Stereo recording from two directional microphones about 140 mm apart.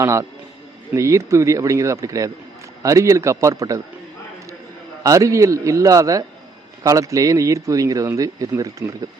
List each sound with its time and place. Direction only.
0.0 s a man's voice: 20° right (ahead or behind)
5.0 s a man's voice: 25° right (ahead or behind)